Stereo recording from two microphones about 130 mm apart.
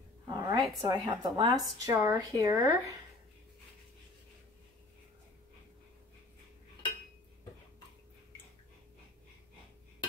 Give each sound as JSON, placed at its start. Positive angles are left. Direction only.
{"t": 0.3, "sound": "speech", "side_deg": -30}